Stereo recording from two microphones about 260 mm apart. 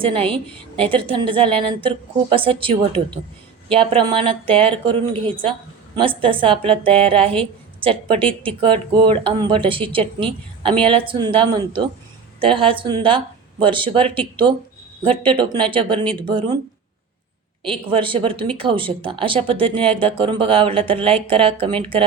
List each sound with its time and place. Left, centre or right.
0.0 s speech: right
17.7 s speech: centre